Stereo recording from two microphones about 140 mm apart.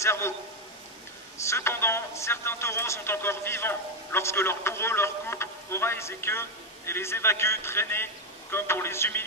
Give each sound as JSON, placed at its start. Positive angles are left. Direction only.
{"t": 0.0, "sound": "a man's voice", "side_deg": 20}
{"t": 1.5, "sound": "speech", "side_deg": 15}